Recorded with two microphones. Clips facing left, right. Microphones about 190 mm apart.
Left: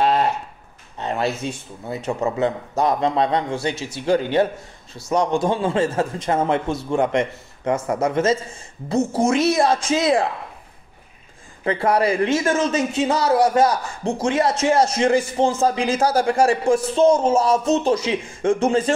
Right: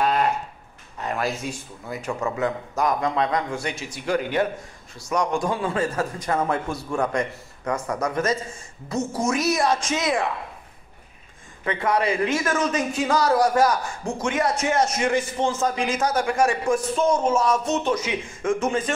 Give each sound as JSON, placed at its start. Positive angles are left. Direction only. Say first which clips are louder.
{"t": 0.0, "sound": "a sound", "louder": "left 3 dB", "side_deg": 30}
{"t": 1.9, "sound": "a man's voice", "louder": "left 4 dB", "side_deg": 25}
{"t": 11.6, "sound": "speech", "louder": "left 4 dB", "side_deg": 30}